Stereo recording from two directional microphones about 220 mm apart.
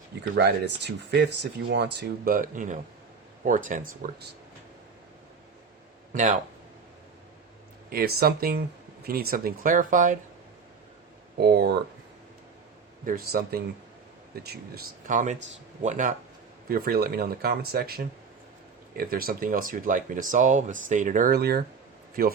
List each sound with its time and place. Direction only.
0.3 s speech: 50° right (ahead or behind)
6.1 s speech: 35° right (ahead or behind)
7.9 s speech: 45° right (ahead or behind)
11.3 s speech: 50° right (ahead or behind)
13.1 s speech: 40° right (ahead or behind)